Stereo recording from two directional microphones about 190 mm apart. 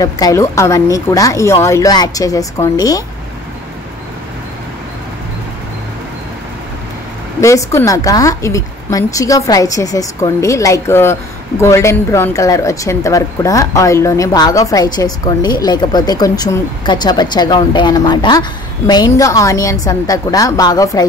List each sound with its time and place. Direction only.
0.0 s speech: 15° left (ahead or behind)
7.3 s speech: 15° left (ahead or behind)